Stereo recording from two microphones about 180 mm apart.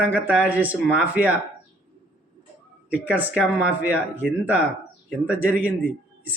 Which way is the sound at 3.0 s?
10° right (ahead or behind).